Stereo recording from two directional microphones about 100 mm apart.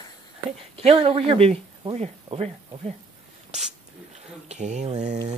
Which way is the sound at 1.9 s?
90° right.